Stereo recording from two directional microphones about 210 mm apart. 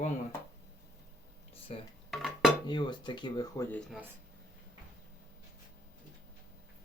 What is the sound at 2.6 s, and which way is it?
Speech, 20° left (ahead or behind).